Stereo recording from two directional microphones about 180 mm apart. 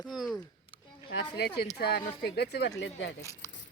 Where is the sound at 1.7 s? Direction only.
65° left (ahead or behind); by 3.1 s 85° left.